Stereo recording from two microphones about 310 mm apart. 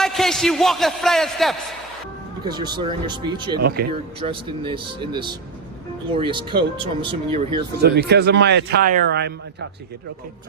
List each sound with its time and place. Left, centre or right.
0.0 s a man's voice: centre
2.4 s speech: centre
3.6 s speech: right
4.2 s speech: centre
7.8 s speech: right